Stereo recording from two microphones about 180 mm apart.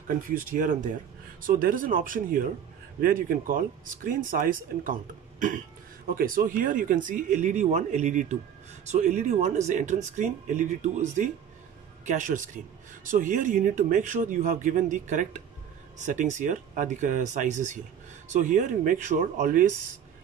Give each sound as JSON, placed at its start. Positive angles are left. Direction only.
{"t": 0.1, "sound": "speech", "side_deg": -50}
{"t": 6.0, "sound": "a man's voice", "side_deg": -55}